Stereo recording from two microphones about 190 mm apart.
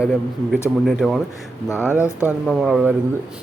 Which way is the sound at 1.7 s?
10° left (ahead or behind).